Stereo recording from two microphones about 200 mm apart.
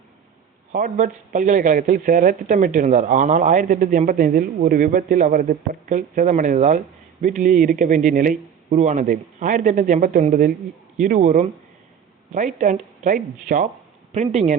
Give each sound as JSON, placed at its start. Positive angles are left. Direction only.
{"t": 0.7, "sound": "speech", "side_deg": -40}